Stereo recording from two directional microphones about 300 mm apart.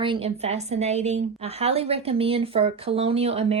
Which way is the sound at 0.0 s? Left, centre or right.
Centre.